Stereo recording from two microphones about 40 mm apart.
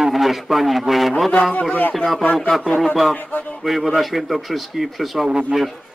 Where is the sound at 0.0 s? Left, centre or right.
Centre.